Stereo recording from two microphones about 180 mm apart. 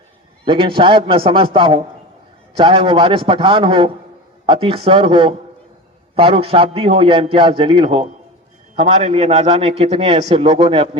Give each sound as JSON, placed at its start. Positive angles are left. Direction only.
{"t": 0.4, "sound": "a man's voice", "side_deg": -30}